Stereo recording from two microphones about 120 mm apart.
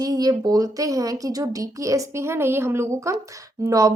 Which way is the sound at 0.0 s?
30° right (ahead or behind).